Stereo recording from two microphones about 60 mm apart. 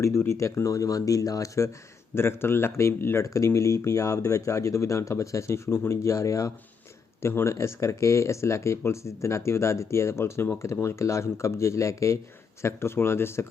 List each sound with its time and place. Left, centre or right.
0.0 s speech: left
2.1 s speech: left
3.2 s speech: left
7.2 s speech: left
10.6 s speech: left
12.6 s speech: left